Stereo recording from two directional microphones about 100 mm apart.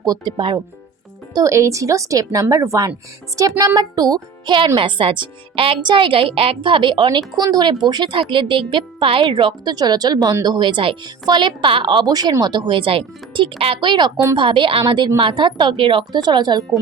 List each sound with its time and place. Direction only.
0.0 s speech: 40° right (ahead or behind)
1.3 s a woman's voice: 35° right (ahead or behind)
4.8 s speech: 60° right (ahead or behind)
7.3 s speech: 45° right (ahead or behind)
9.7 s speech: 45° right (ahead or behind)
12.1 s speech: 40° right (ahead or behind); by 14.9 s 60° right (ahead or behind)
14.9 s speech: 45° right (ahead or behind)